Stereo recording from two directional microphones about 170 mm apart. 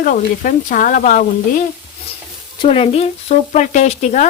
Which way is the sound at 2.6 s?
30° left (ahead or behind).